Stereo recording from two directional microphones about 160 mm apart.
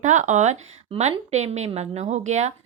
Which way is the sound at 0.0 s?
50° right (ahead or behind).